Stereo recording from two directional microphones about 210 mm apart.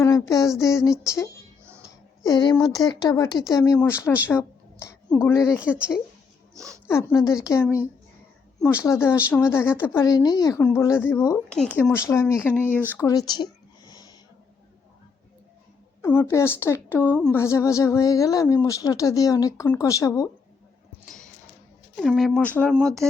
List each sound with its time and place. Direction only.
0.0 s a sound: 15° left (ahead or behind)
0.6 s speech: 15° left (ahead or behind)
2.2 s speech: 20° left (ahead or behind)
4.3 s a sound: 10° left (ahead or behind)
5.3 s speech: 15° left (ahead or behind)
5.5 s speech: 5° right (ahead or behind)
6.6 s speech: 5° left (ahead or behind)
8.8 s speech: 15° left (ahead or behind)
13.0 s a sound: 15° left (ahead or behind)
16.0 s speech: 10° left (ahead or behind)
21.9 s speech: centre (ahead or behind)